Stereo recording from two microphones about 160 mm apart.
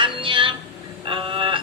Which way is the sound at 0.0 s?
30° right (ahead or behind).